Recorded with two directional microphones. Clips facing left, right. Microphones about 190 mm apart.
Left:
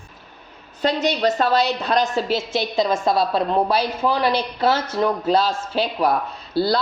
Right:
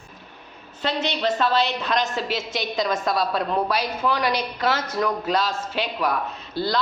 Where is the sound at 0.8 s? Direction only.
40° left (ahead or behind).